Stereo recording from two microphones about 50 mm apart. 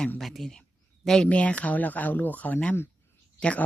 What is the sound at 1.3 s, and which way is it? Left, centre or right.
Speech, left.